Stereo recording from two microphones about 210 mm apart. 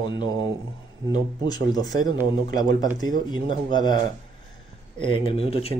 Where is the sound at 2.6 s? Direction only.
20° left (ahead or behind).